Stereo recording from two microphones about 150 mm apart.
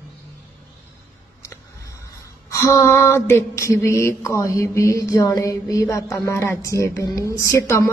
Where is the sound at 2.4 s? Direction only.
20° left (ahead or behind).